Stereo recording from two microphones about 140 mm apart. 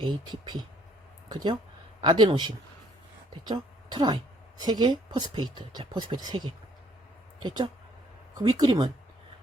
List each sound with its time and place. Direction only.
0.0 s a woman's voice: 30° right (ahead or behind)